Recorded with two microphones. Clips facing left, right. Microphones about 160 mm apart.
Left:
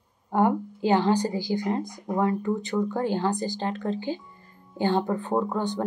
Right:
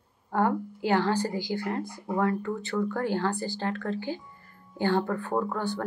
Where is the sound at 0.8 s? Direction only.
20° left (ahead or behind).